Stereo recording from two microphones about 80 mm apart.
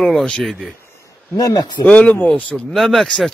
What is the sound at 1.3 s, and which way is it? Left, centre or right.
Speech, left.